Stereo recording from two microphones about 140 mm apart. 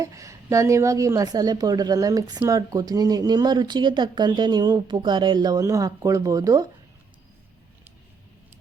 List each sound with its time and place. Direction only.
0.0 s a woman's voice: 25° right (ahead or behind)